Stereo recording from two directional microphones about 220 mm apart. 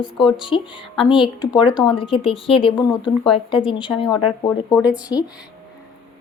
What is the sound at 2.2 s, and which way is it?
Speech, 25° left (ahead or behind).